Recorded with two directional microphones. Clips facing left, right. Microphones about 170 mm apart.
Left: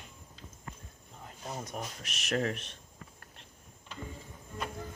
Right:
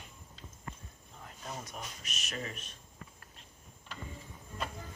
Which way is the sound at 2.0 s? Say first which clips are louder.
Left 12 dB; 80° left.